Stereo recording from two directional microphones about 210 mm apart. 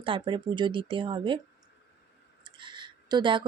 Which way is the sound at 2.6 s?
20° right (ahead or behind).